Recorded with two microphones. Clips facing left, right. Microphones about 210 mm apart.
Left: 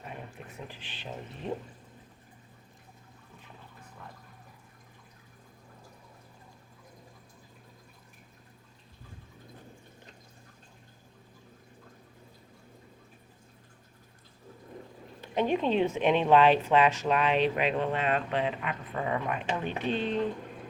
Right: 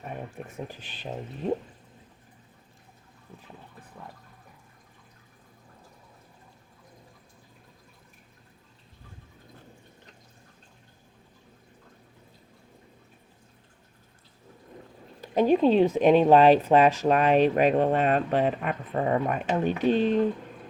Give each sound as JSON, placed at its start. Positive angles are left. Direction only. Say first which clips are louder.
{"t": 0.0, "sound": "speech", "louder": "right 6 dB", "side_deg": -45}
{"t": 15.2, "sound": "speech", "louder": "right 7 dB", "side_deg": -40}